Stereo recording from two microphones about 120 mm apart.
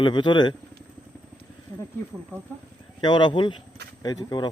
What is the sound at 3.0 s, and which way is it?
Speech, 40° left (ahead or behind).